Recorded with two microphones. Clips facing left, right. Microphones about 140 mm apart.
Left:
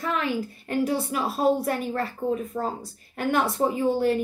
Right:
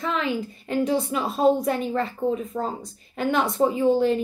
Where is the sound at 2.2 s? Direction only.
20° right (ahead or behind).